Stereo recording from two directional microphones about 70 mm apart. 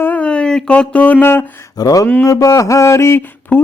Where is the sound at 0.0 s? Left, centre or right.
Left.